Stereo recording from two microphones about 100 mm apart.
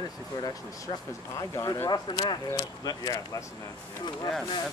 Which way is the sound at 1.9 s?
45° left (ahead or behind).